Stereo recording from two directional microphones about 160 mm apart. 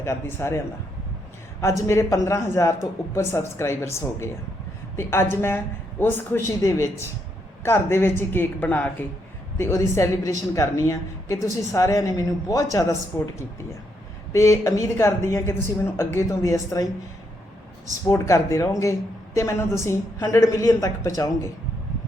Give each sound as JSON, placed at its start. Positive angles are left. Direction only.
{"t": 0.0, "sound": "speech", "side_deg": 15}
{"t": 1.6, "sound": "a woman's voice", "side_deg": 20}
{"t": 14.3, "sound": "a woman's voice", "side_deg": 20}
{"t": 18.1, "sound": "a woman's voice", "side_deg": 20}